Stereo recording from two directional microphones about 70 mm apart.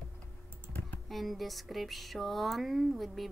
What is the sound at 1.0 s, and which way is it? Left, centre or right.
Speech, centre.